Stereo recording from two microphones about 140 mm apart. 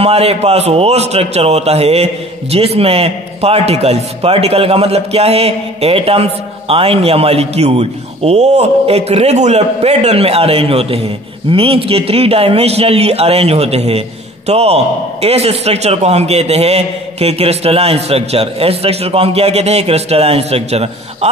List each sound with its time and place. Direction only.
0.0 s a man's voice: 45° right (ahead or behind)